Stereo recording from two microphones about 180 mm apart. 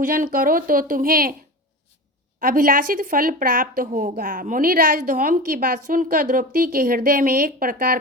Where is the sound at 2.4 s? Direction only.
50° right (ahead or behind).